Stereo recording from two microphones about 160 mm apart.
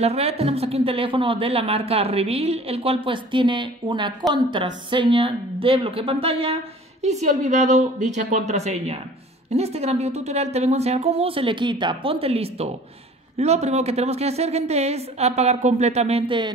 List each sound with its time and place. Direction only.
0.0 s a woman's voice: 40° right (ahead or behind)